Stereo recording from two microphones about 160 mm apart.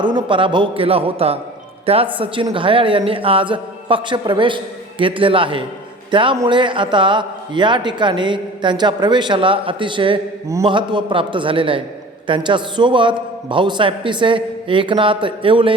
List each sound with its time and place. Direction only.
0.0 s a man's voice: 30° right (ahead or behind)